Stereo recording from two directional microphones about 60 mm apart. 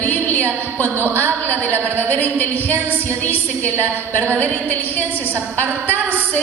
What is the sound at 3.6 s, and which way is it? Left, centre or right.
Speech, right.